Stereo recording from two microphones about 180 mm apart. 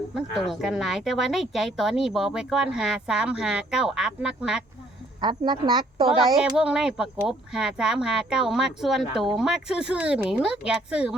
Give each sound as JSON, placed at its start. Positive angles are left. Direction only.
{"t": 0.1, "sound": "speech", "side_deg": 0}
{"t": 5.2, "sound": "a woman's voice", "side_deg": -25}
{"t": 6.3, "sound": "speech", "side_deg": -5}